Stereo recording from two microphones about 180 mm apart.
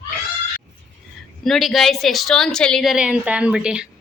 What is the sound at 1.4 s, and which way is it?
Speech, centre (ahead or behind).